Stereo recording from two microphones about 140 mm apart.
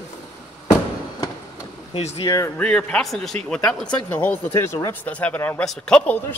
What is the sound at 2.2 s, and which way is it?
Speech, 25° left (ahead or behind).